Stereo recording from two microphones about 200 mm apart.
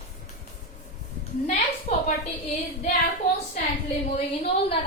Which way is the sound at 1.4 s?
35° left (ahead or behind).